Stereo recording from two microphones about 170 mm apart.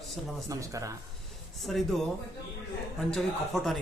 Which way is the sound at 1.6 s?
Centre (ahead or behind).